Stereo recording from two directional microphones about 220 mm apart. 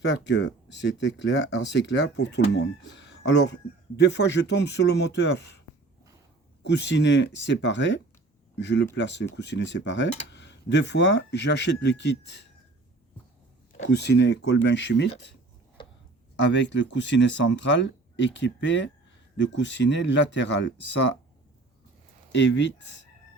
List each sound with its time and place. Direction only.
0.0 s speech: 50° left (ahead or behind)
6.7 s speech: 50° left (ahead or behind)
13.8 s speech: 50° left (ahead or behind)
15.8 s a sound: 20° left (ahead or behind)
16.4 s speech: 55° left (ahead or behind)
22.3 s speech: 55° left (ahead or behind)